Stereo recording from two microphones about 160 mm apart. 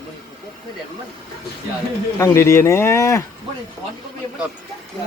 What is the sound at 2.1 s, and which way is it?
Speech, 20° left (ahead or behind).